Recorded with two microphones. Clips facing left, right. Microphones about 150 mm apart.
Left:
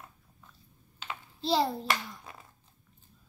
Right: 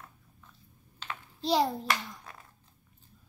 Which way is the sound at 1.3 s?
15° right (ahead or behind).